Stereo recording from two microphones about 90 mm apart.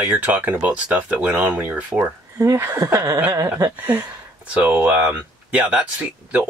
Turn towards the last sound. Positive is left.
turn(degrees=-15)  # may be behind; listen again after turning